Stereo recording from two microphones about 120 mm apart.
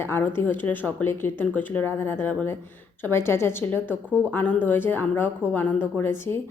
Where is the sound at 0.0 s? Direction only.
20° left (ahead or behind).